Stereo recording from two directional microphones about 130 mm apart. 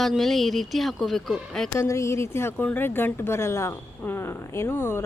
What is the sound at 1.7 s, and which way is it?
A woman's voice, 20° left (ahead or behind).